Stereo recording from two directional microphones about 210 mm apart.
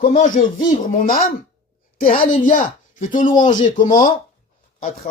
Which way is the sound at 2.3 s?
40° left (ahead or behind).